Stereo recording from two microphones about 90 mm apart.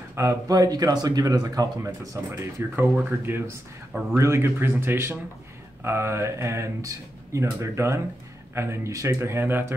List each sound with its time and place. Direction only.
0.1 s speech: 30° right (ahead or behind)
1.8 s speech: 30° right (ahead or behind)